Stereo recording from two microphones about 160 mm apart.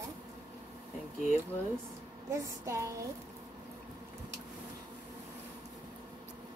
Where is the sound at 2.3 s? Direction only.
20° right (ahead or behind).